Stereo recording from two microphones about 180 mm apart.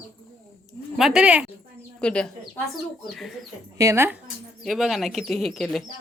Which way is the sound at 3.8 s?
15° right (ahead or behind).